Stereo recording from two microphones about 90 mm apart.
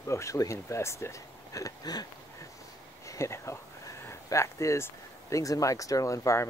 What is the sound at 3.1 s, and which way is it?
Speech, 30° left (ahead or behind).